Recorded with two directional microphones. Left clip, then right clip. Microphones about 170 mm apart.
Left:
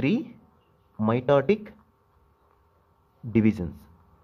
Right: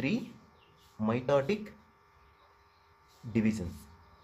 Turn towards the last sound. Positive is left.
turn(degrees=45)  # may be behind; listen again after turning